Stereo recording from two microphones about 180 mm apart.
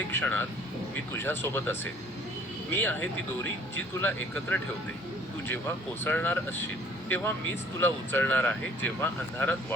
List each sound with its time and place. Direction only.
0.1 s speech: 10° left (ahead or behind)
7.8 s speech: 10° left (ahead or behind)